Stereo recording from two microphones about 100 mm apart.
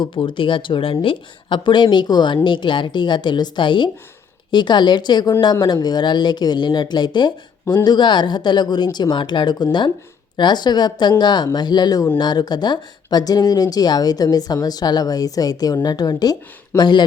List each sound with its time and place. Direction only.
0.0 s speech: 55° left (ahead or behind)